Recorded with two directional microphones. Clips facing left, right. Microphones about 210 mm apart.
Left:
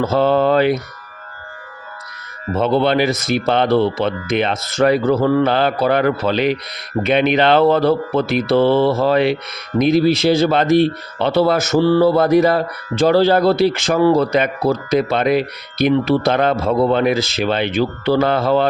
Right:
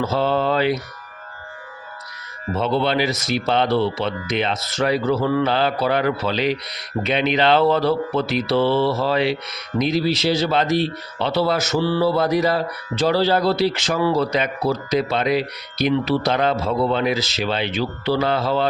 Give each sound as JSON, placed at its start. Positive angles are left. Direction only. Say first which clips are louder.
{"t": 0.0, "sound": "speech", "louder": "left 5 dB", "side_deg": 50}
{"t": 2.6, "sound": "speech", "louder": "left 5 dB", "side_deg": 55}